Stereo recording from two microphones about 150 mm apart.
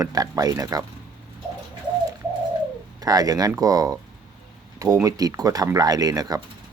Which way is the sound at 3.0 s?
25° right (ahead or behind).